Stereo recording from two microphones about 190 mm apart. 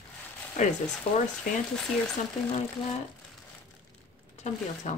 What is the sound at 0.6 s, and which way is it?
Speech, 40° left (ahead or behind).